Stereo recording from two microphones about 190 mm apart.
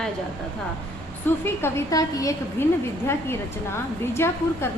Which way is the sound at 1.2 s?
10° left (ahead or behind).